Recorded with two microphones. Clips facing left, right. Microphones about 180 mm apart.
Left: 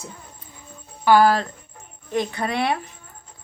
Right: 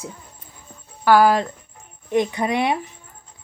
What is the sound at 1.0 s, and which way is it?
Speech, 10° right (ahead or behind).